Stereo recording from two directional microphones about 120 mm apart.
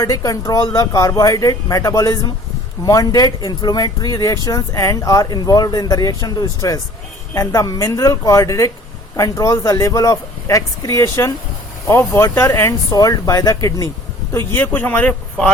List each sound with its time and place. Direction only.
0.0 s speech: 30° left (ahead or behind)
14.3 s speech: 15° left (ahead or behind)